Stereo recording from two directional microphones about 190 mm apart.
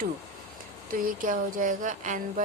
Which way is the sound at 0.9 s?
45° right (ahead or behind).